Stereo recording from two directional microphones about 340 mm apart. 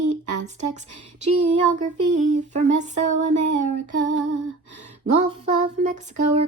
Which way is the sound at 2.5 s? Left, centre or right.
Right.